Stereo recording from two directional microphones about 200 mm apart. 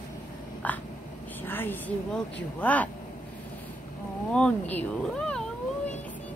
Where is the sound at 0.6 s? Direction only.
10° left (ahead or behind).